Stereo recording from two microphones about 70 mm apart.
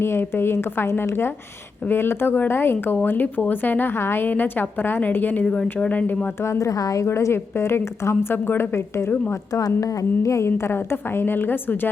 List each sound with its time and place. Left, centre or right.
0.0 s a woman's voice: left
6.4 s a woman's voice: left
9.6 s a woman's voice: left